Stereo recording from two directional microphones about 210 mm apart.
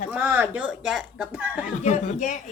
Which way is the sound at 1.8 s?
35° left (ahead or behind).